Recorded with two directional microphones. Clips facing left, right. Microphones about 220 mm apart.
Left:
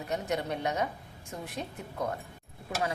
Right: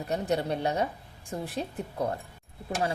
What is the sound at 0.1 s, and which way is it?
A woman's voice, 35° right (ahead or behind).